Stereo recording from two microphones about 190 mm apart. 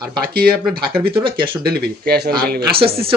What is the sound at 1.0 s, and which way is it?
Speech, 25° right (ahead or behind).